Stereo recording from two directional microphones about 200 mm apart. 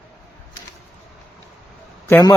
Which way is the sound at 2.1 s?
15° left (ahead or behind).